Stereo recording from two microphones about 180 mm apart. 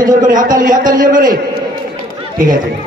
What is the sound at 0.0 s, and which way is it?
A man's voice, 45° right (ahead or behind).